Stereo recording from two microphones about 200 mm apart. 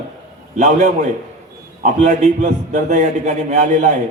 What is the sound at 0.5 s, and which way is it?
A man's voice, 35° right (ahead or behind).